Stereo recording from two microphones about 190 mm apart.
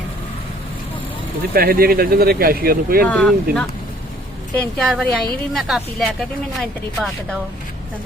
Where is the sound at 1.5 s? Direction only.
50° right (ahead or behind).